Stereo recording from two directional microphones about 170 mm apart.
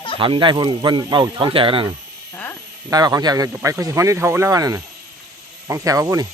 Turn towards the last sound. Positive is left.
turn(degrees=-20)  # may be behind; listen again after turning